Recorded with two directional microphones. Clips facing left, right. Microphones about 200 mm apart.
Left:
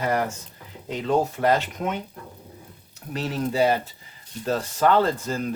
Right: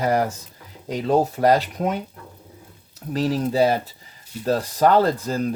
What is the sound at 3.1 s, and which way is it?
Speech, 35° right (ahead or behind).